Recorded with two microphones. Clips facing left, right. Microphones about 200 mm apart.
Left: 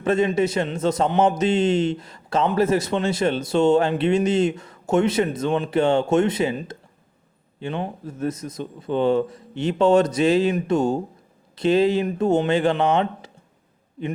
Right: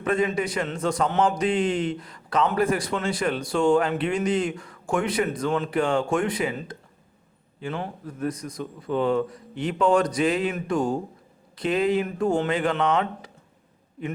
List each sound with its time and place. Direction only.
0.0 s a man's voice: 25° left (ahead or behind)